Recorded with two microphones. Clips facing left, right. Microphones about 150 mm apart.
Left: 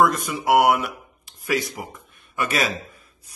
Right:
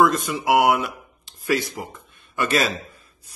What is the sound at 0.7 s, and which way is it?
A man's voice, 10° left (ahead or behind).